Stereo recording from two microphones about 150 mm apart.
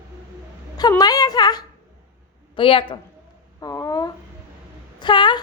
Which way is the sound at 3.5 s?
25° left (ahead or behind).